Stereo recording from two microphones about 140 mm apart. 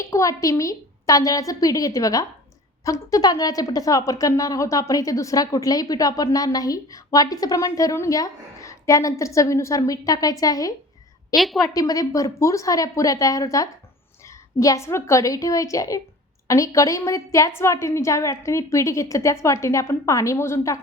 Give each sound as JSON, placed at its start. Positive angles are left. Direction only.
{"t": 0.0, "sound": "a woman's voice", "side_deg": 20}
{"t": 11.3, "sound": "a woman's voice", "side_deg": 0}
{"t": 11.6, "sound": "a woman's voice", "side_deg": 25}